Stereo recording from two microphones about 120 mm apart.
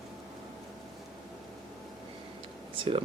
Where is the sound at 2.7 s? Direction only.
50° right (ahead or behind).